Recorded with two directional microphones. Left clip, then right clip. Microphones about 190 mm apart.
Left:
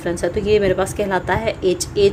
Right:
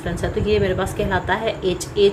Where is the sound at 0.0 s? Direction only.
40° left (ahead or behind).